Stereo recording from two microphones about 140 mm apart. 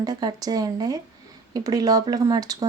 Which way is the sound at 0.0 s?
30° right (ahead or behind).